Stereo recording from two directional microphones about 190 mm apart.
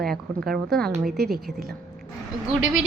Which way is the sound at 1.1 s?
55° right (ahead or behind).